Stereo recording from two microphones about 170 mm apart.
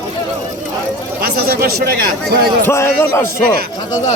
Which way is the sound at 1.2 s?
65° right (ahead or behind).